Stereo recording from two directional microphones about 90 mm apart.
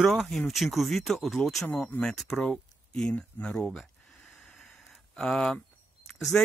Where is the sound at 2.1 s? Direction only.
5° left (ahead or behind).